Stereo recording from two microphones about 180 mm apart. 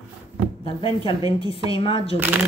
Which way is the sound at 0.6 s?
30° left (ahead or behind).